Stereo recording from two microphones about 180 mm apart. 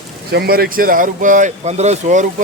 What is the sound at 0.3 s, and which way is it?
Speech, 60° right (ahead or behind).